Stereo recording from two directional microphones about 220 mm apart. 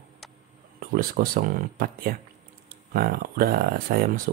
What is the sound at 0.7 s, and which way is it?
Speech, 40° right (ahead or behind).